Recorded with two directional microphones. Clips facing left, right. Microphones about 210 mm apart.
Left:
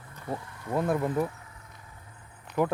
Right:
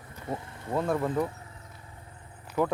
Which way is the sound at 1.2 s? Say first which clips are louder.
Even; 25° right (ahead or behind).